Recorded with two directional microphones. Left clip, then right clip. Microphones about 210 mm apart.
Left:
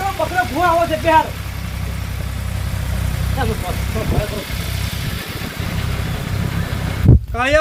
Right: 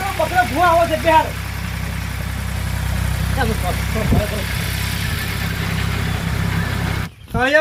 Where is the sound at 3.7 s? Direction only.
50° left (ahead or behind).